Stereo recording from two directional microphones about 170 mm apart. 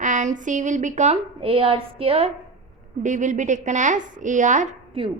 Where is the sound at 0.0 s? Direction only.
45° right (ahead or behind).